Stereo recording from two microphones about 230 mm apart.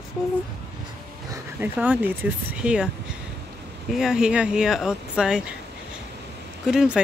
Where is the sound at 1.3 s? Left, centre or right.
Centre.